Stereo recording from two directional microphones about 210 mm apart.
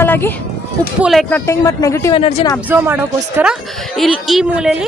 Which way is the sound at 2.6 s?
10° right (ahead or behind).